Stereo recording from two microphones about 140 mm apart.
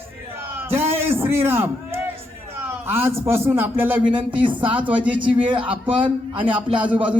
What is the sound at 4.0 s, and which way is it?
Speech, 35° right (ahead or behind).